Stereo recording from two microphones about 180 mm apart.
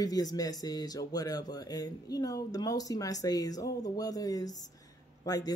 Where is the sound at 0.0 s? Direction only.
20° left (ahead or behind).